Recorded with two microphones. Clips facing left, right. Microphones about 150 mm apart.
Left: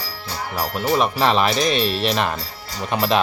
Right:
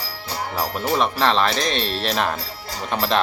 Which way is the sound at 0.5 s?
5° left (ahead or behind).